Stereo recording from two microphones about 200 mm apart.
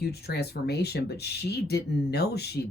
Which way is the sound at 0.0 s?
55° left (ahead or behind).